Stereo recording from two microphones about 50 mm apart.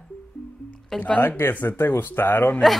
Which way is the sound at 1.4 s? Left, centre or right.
Left.